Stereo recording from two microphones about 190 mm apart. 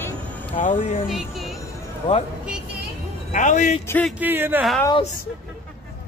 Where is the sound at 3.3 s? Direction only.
40° left (ahead or behind).